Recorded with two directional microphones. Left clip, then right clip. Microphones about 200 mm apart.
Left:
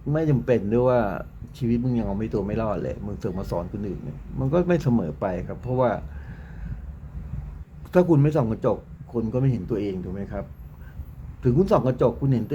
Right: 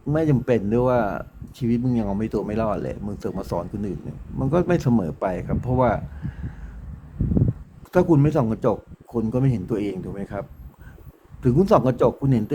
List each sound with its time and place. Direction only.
0.1 s speech: 15° right (ahead or behind)
7.9 s speech: 5° right (ahead or behind)
11.4 s a man's voice: 20° right (ahead or behind)